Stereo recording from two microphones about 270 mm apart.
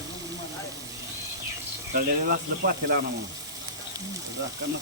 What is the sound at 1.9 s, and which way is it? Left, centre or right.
Speech, right.